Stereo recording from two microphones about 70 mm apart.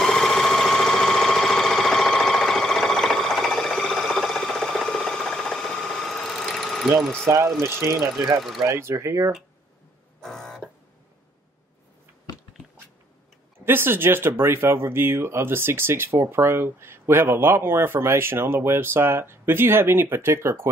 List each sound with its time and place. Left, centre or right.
0.0 s sewing machine: centre
7.2 s speech: right
8.4 s speech: centre
8.6 s speech: right
10.2 s a sound: centre
13.7 s speech: right